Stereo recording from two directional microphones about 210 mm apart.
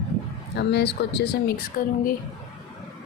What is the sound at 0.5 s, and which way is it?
A woman's voice, 55° left (ahead or behind).